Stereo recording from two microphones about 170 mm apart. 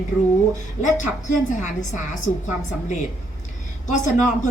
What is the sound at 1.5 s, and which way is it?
Speech, 45° left (ahead or behind).